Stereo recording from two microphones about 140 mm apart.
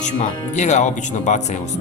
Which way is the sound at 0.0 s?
60° left (ahead or behind).